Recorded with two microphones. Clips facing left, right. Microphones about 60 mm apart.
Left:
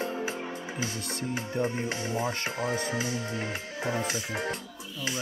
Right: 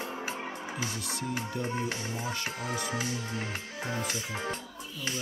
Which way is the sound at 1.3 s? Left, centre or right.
Left.